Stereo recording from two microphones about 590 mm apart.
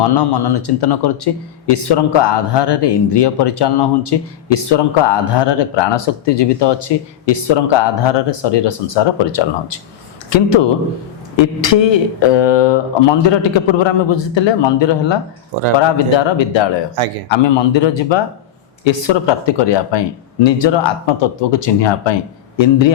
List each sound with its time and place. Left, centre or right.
0.0 s speech: left